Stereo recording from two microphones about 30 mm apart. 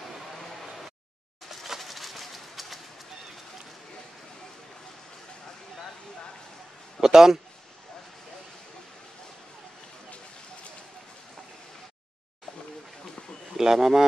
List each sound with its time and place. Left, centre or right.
1.5 s a sound: centre
7.0 s a man's voice: centre
13.6 s a man's voice: centre